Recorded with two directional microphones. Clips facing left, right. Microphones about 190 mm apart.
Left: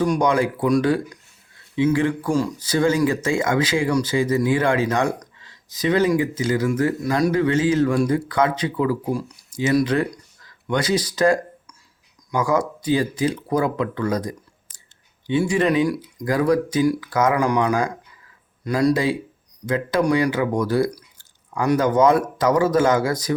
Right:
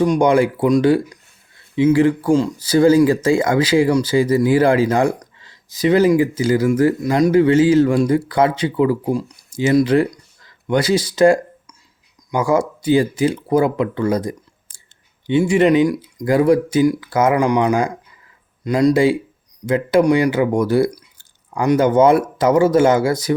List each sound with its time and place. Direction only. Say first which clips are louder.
0.0 s speech: right 5 dB; 25° right (ahead or behind)